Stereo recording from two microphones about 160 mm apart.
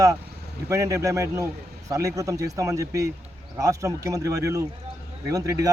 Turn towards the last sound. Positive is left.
turn(degrees=-20)  # may be behind; listen again after turning